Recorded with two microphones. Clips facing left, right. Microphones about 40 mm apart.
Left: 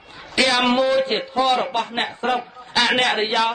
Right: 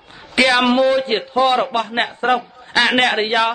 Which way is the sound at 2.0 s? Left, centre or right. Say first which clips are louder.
Right 7 dB; right.